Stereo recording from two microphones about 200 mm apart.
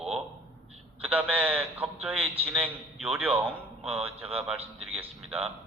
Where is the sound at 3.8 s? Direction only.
30° right (ahead or behind).